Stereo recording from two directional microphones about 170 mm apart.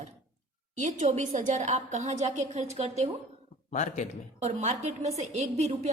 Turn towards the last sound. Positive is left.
turn(degrees=-40)  # may be behind; listen again after turning